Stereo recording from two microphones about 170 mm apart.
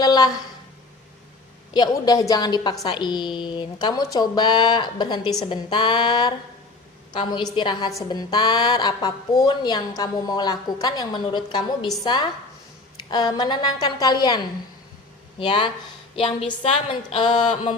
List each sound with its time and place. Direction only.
0.0 s a woman's voice: 20° left (ahead or behind)
1.7 s a woman's voice: 25° left (ahead or behind)